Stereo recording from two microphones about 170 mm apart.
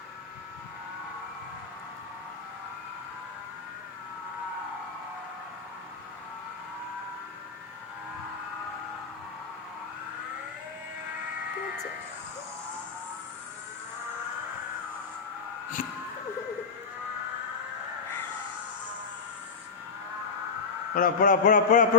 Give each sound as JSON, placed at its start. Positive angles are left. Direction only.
{"t": 20.9, "sound": "a man's voice", "side_deg": 55}